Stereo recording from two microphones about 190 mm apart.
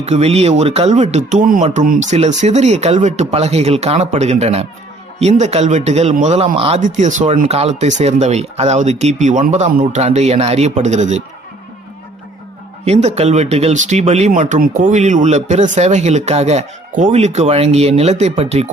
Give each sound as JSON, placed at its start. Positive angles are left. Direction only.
{"t": 0.0, "sound": "speech", "side_deg": -35}
{"t": 12.8, "sound": "speech", "side_deg": -35}